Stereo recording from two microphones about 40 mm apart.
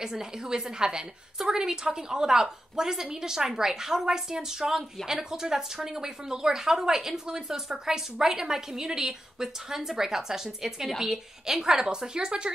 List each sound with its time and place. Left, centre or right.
0.0 s a woman's voice: centre